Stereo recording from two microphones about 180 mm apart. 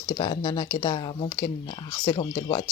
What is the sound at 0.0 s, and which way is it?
Speech, 25° left (ahead or behind).